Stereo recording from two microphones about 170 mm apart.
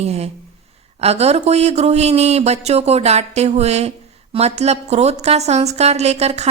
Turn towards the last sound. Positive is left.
turn(degrees=-40)  # may be behind; listen again after turning